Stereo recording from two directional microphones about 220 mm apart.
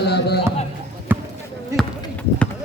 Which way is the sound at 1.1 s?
10° right (ahead or behind).